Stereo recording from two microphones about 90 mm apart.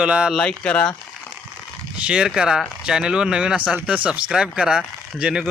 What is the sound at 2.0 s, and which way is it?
Speech, 10° right (ahead or behind).